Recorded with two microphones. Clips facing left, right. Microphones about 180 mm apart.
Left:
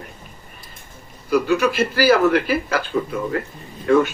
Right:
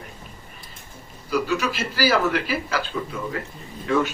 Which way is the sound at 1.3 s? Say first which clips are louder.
Left 6 dB; 55° left (ahead or behind).